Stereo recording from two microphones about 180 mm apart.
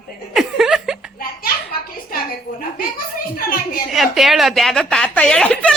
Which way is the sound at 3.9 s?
Centre (ahead or behind).